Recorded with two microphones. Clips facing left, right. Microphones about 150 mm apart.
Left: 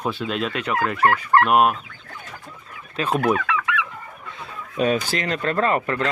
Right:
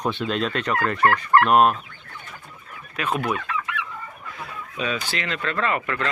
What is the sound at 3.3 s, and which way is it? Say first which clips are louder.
Chicken: left 5 dB; 90° left.